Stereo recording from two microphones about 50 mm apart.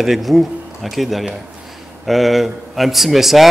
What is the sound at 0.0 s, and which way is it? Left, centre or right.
A man's voice, centre.